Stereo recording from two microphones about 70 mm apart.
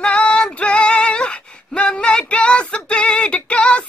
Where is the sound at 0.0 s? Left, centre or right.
Centre.